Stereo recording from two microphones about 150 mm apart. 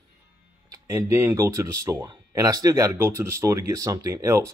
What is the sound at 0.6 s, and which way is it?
A man's voice, 20° right (ahead or behind).